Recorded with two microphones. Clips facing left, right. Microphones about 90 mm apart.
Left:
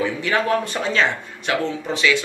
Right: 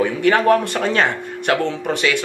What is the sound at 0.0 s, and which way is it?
A man's voice, 50° right (ahead or behind).